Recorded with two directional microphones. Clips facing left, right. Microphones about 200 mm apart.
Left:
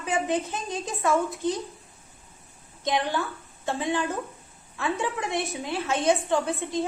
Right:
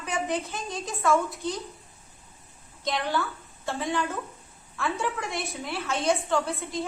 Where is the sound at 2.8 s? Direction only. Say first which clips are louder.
Left 2 dB; 20° left (ahead or behind).